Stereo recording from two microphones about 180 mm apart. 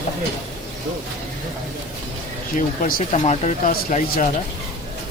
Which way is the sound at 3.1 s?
40° left (ahead or behind).